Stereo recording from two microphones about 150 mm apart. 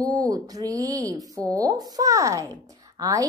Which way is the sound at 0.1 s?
25° right (ahead or behind).